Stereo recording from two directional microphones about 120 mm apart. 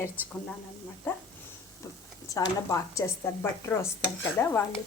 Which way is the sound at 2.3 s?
30° left (ahead or behind).